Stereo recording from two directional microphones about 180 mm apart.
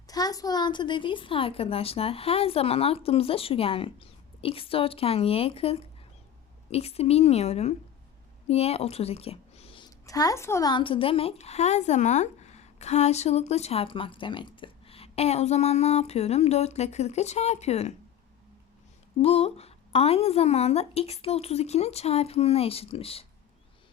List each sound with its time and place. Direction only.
0.1 s a woman's voice: 20° left (ahead or behind); by 17.9 s 35° left (ahead or behind)
19.2 s a woman's voice: 35° left (ahead or behind)